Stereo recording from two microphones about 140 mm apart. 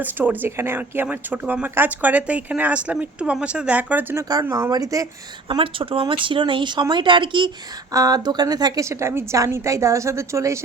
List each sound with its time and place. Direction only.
0.0 s a woman's voice: 15° right (ahead or behind)
5.5 s a woman's voice: 40° right (ahead or behind); by 10.6 s 20° right (ahead or behind)